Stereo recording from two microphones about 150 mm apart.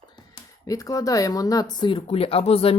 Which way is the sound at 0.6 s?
20° left (ahead or behind).